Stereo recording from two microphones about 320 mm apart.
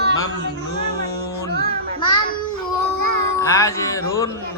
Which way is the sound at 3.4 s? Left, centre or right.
Centre.